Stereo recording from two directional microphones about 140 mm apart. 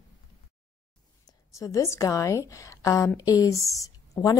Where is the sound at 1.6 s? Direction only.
20° left (ahead or behind).